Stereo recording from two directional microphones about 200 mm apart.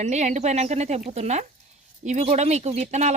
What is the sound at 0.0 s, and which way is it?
Speech, 35° right (ahead or behind).